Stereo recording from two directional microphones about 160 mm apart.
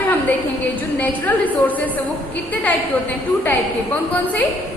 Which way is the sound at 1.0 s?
10° left (ahead or behind).